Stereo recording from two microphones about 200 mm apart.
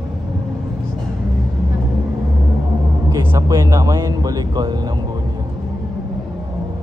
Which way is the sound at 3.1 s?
15° right (ahead or behind).